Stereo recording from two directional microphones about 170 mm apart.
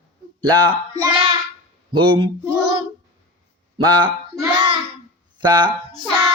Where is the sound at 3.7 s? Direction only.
25° right (ahead or behind).